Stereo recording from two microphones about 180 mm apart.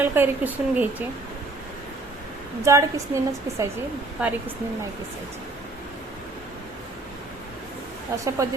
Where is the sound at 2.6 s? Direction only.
15° right (ahead or behind).